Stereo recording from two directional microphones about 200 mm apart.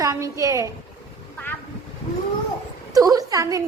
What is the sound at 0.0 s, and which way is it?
Speech, 15° right (ahead or behind).